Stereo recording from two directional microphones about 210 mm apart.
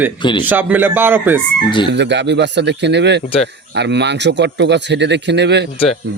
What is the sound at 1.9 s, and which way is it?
Speech, 55° right (ahead or behind).